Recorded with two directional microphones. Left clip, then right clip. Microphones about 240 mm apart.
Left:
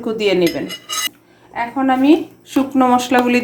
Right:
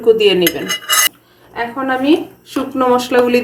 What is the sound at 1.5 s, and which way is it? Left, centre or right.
A woman's voice, left.